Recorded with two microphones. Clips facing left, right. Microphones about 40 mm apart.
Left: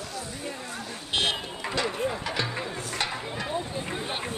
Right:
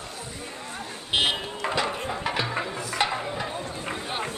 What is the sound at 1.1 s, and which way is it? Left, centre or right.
Vehicle, centre.